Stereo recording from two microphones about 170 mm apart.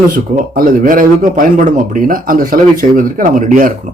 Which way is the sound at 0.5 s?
55° right (ahead or behind).